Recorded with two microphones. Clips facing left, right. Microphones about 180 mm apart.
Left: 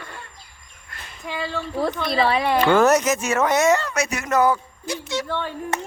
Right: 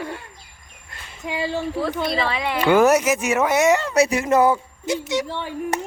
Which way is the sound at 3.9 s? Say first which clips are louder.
Right 5 dB; 30° right (ahead or behind).